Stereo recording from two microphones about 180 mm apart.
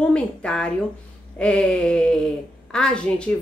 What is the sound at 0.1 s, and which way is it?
A woman's voice, 5° left (ahead or behind).